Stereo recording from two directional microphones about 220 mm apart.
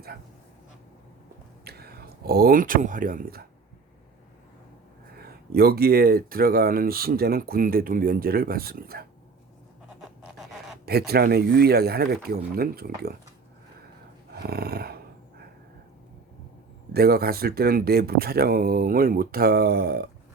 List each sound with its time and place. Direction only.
1.6 s speech: 45° right (ahead or behind)
5.1 s speech: 45° right (ahead or behind)
10.8 s speech: 45° right (ahead or behind)
14.3 s a sound: 45° right (ahead or behind)
16.9 s speech: 45° right (ahead or behind)